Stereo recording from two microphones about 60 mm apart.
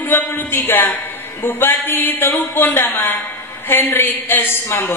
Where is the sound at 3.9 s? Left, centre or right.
Left.